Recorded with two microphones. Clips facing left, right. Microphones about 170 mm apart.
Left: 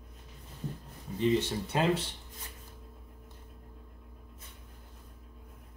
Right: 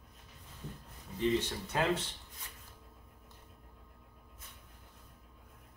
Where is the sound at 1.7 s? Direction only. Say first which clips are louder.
Left 3 dB; 20° left (ahead or behind).